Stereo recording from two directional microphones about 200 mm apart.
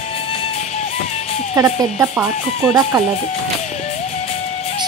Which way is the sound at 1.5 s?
15° right (ahead or behind).